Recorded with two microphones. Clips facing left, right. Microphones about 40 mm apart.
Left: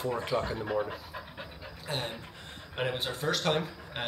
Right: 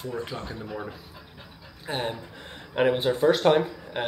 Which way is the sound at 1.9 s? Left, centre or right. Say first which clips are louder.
Right 6 dB; centre.